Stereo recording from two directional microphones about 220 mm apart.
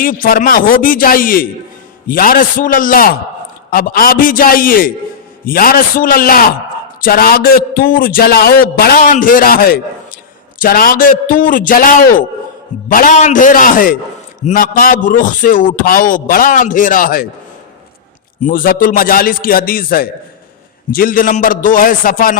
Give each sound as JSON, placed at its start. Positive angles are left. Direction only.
{"t": 0.0, "sound": "a man's voice", "side_deg": 40}
{"t": 18.4, "sound": "a man's voice", "side_deg": 40}